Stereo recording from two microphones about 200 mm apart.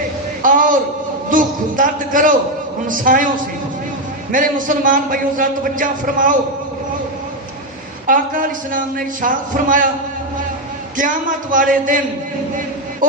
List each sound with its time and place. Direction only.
0.4 s a sound: 40° right (ahead or behind)
1.3 s a man's voice: 40° right (ahead or behind)
4.3 s a man's voice: 40° right (ahead or behind)
8.0 s a man's voice: 45° right (ahead or behind)
10.9 s a man's voice: 40° right (ahead or behind)
13.0 s speech: 40° right (ahead or behind)